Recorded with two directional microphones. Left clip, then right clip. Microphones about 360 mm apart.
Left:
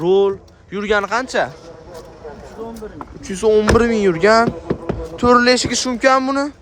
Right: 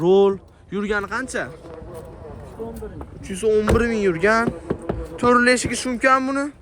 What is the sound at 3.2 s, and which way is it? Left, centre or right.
Speech, centre.